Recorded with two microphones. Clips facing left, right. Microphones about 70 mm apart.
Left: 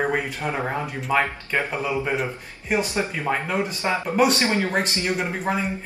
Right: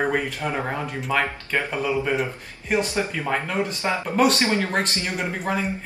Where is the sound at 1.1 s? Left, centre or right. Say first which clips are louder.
Left 2 dB; centre.